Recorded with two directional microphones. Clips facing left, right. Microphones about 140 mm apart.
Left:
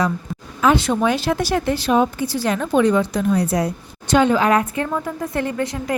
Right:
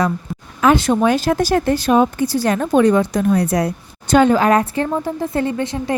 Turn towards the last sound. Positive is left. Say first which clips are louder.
# right 2 dB
turn(degrees=-25)  # may be behind; listen again after turning